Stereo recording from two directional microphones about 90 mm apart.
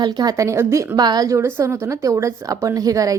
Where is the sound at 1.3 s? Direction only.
30° right (ahead or behind).